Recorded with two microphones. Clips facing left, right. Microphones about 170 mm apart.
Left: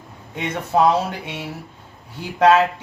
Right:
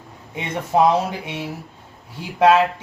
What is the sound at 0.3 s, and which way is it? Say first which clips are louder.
Speech: right 1 dB; 15° right (ahead or behind).